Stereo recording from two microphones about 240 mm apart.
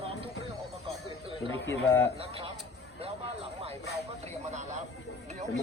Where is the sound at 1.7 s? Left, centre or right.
Centre.